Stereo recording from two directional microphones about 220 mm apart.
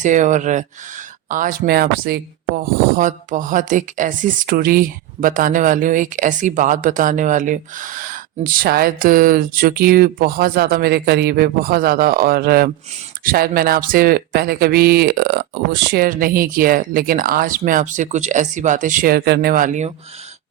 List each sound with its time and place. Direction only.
0.0 s speech: 35° right (ahead or behind)